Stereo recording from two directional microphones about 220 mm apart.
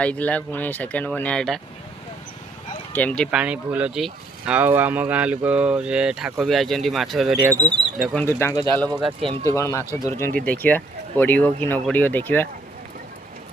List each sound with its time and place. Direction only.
0.0 s speech: 5° left (ahead or behind)
2.9 s speech: 5° left (ahead or behind)
3.4 s speech: 5° right (ahead or behind)
8.2 s speech: 10° left (ahead or behind)
8.9 s speech: 20° right (ahead or behind)
9.4 s speech: 15° left (ahead or behind)